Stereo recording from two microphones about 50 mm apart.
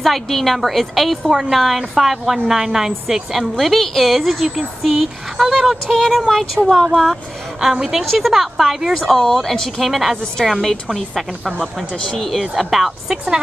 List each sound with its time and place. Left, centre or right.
0.0 s a woman's voice: centre
7.6 s a woman's voice: centre
11.9 s speech: centre
12.2 s a woman's voice: centre